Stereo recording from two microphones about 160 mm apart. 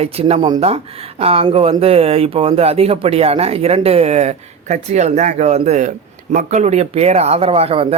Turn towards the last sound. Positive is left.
turn(degrees=-35)  # may be behind; listen again after turning